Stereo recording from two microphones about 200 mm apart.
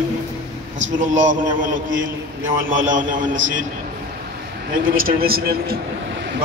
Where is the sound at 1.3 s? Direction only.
40° right (ahead or behind).